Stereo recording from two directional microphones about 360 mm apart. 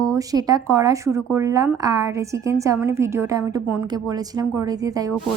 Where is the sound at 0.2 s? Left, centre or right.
Centre.